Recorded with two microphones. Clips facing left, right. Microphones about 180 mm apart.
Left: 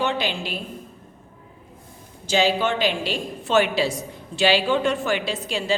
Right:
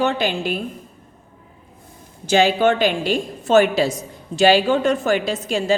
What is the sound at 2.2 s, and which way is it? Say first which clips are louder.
A woman's voice: right 5 dB; 55° right (ahead or behind).